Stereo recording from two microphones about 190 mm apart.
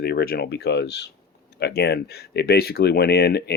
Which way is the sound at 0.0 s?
55° left (ahead or behind).